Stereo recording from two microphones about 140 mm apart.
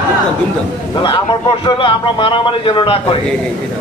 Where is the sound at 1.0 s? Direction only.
35° left (ahead or behind).